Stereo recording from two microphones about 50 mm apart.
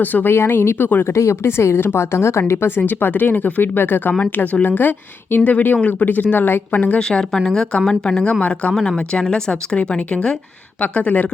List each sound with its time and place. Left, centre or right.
0.0 s speech: left
0.3 s speech: left
1.1 s speech: left
2.5 s speech: left
6.7 s speech: left
7.4 s a woman's voice: centre
8.2 s speech: left
8.7 s speech: centre; by 11.3 s left